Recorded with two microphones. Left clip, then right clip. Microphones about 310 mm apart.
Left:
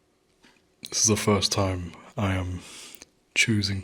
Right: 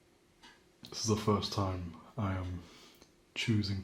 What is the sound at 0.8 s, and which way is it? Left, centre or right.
A man's voice, left.